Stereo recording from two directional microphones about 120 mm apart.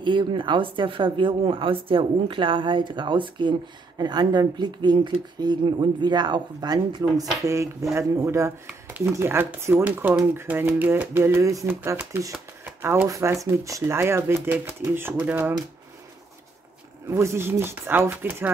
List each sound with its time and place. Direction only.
0.0 s a woman's voice: 40° right (ahead or behind); by 8.5 s 25° right (ahead or behind)
8.6 s speech: 15° right (ahead or behind)
17.1 s speech: 25° right (ahead or behind)